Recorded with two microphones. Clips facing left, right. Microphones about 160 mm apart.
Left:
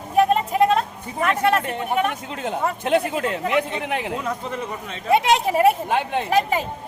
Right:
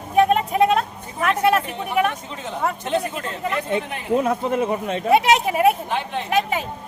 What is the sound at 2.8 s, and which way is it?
A man's voice, 70° left (ahead or behind).